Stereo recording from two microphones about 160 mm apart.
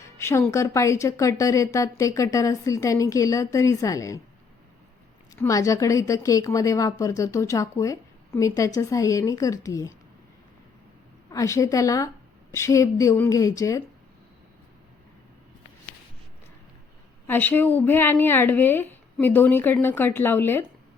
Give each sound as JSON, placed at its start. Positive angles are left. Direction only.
{"t": 0.0, "sound": "a woman's voice", "side_deg": 15}
{"t": 5.4, "sound": "a woman's voice", "side_deg": 20}
{"t": 11.3, "sound": "a woman's voice", "side_deg": 20}
{"t": 17.2, "sound": "a woman's voice", "side_deg": 10}